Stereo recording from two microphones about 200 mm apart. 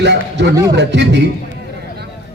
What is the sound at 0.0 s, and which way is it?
A man's voice, 60° right (ahead or behind).